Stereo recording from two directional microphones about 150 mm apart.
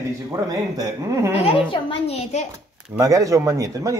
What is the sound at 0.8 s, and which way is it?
Speech, 20° right (ahead or behind).